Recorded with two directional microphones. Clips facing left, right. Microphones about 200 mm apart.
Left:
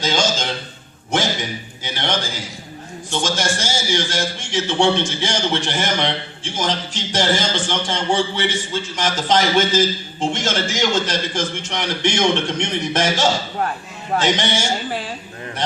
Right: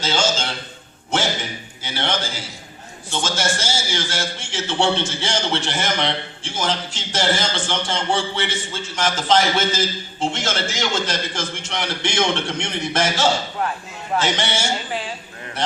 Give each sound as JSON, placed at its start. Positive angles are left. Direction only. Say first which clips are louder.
{"t": 0.0, "sound": "a man's voice", "louder": "left 1 dB", "side_deg": 15}